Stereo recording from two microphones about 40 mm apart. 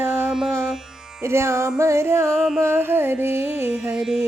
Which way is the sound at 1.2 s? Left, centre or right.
Right.